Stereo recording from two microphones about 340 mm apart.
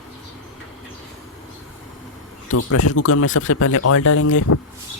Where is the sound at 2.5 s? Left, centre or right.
Left.